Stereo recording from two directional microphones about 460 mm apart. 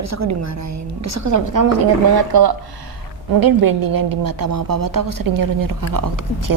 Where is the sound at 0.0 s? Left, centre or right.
Right.